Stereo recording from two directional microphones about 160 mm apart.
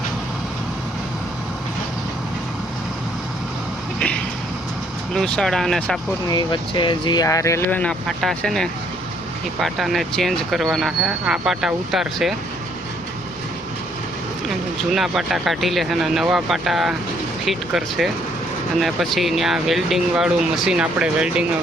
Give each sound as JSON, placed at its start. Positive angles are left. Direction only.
{"t": 5.1, "sound": "speech", "side_deg": 0}
{"t": 6.2, "sound": "speech", "side_deg": 30}
{"t": 14.9, "sound": "speech", "side_deg": 0}